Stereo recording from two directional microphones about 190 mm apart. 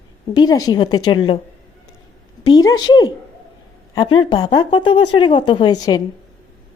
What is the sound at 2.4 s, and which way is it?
Speech, 20° left (ahead or behind).